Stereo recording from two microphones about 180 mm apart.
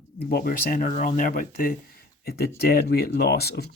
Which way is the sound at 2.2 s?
60° left (ahead or behind).